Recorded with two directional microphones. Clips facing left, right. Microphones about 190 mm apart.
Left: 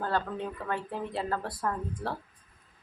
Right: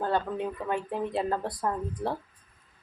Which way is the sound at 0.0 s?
15° right (ahead or behind).